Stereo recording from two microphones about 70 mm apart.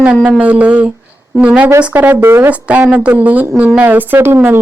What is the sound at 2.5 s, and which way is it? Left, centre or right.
Speech, centre.